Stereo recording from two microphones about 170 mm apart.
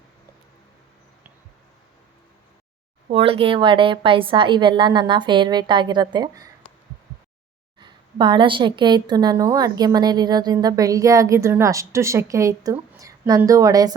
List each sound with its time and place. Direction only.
3.1 s a woman's voice: 35° right (ahead or behind)
7.8 s a woman's voice: 25° right (ahead or behind)